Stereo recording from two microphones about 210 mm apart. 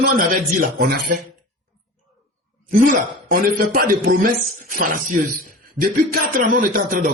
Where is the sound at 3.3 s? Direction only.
45° right (ahead or behind).